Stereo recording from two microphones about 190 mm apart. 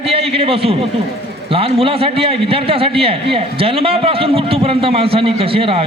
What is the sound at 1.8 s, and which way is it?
A man's voice, 30° right (ahead or behind).